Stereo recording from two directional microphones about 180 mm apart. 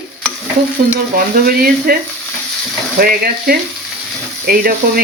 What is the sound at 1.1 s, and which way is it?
Speech, 55° right (ahead or behind).